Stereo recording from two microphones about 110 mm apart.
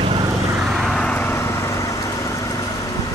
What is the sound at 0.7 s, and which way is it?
Vehicle, centre (ahead or behind).